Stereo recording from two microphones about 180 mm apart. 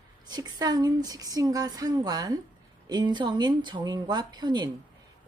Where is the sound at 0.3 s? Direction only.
25° right (ahead or behind).